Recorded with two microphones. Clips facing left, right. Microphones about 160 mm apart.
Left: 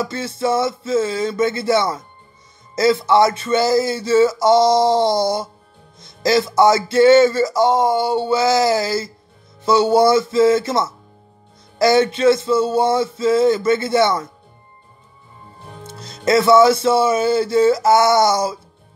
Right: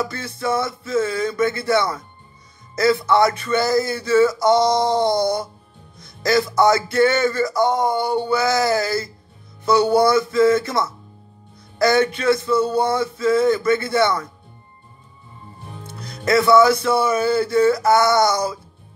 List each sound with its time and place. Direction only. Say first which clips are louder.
0.0 s music: left 3 dB; 25° left (ahead or behind)
16.0 s music: left 2 dB; 25° left (ahead or behind)